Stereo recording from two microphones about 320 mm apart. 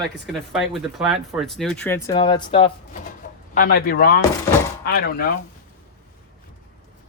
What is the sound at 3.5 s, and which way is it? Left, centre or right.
Speech, left.